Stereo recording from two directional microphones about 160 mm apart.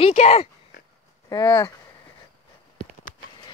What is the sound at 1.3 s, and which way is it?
Speech, 25° left (ahead or behind).